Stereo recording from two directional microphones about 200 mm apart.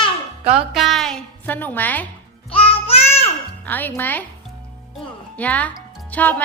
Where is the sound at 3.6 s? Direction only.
10° left (ahead or behind).